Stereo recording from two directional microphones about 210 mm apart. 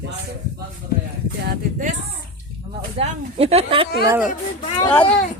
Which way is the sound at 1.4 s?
40° right (ahead or behind).